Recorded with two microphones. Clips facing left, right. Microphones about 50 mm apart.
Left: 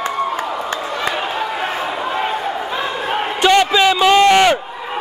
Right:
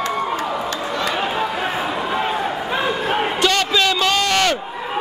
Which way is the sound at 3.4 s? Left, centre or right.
Centre.